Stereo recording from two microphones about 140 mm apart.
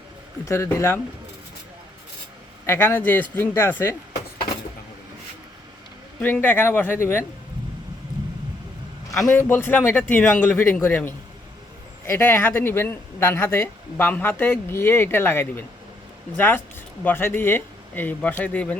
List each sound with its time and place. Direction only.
0.4 s speech: 20° left (ahead or behind)
2.6 s speech: 15° left (ahead or behind)
6.1 s speech: 10° left (ahead or behind)
9.1 s a man's voice: centre (ahead or behind)
9.4 s speech: 15° left (ahead or behind)
17.0 s speech: 15° left (ahead or behind)